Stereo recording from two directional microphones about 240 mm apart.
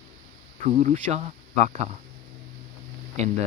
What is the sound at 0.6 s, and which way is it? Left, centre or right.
Speech, right.